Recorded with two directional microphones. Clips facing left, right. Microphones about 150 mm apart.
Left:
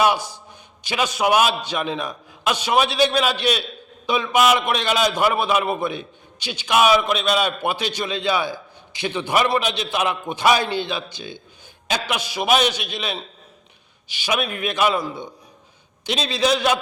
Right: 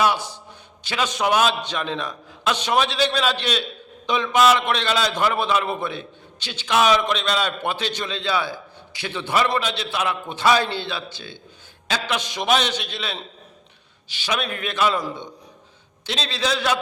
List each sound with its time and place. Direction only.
0.0 s a man's voice: 10° left (ahead or behind)
16.0 s a man's voice: 15° left (ahead or behind)